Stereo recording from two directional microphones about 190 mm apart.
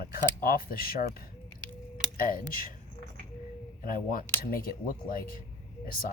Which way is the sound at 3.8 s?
50° left (ahead or behind).